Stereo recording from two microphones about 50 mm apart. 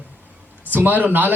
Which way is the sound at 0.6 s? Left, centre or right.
Right.